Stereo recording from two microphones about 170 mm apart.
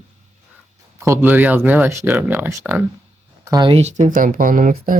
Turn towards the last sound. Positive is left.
turn(degrees=-55)  # may be behind; listen again after turning